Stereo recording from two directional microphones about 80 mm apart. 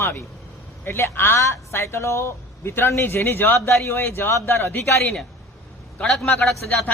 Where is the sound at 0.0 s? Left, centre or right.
Left.